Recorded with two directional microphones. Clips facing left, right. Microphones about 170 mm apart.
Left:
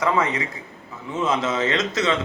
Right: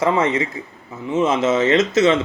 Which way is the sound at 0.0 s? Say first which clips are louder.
Right 4 dB; 25° right (ahead or behind).